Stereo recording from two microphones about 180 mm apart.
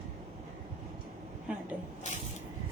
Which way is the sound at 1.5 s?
5° right (ahead or behind).